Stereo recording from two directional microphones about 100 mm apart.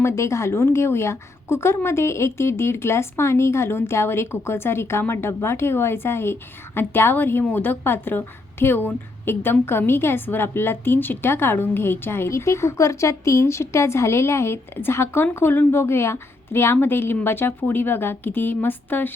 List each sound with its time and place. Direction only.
0.0 s a woman's voice: 30° left (ahead or behind)